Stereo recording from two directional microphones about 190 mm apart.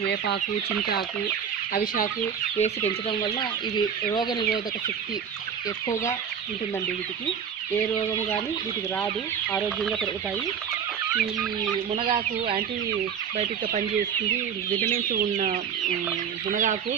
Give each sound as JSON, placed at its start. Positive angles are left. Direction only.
{"t": 1.7, "sound": "chicken", "side_deg": 50}
{"t": 2.6, "sound": "speech", "side_deg": 35}
{"t": 5.9, "sound": "chicken", "side_deg": 15}
{"t": 9.6, "sound": "chicken", "side_deg": 0}
{"t": 11.1, "sound": "chicken", "side_deg": 0}
{"t": 11.9, "sound": "speech", "side_deg": -30}
{"t": 13.3, "sound": "chicken", "side_deg": -35}
{"t": 14.8, "sound": "speech", "side_deg": -45}